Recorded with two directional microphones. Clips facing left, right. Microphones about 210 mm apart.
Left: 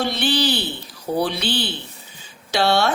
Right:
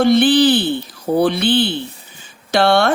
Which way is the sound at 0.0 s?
55° right (ahead or behind).